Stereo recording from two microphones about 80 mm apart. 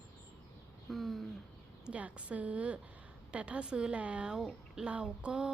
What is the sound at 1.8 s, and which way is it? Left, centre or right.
A woman's voice, centre.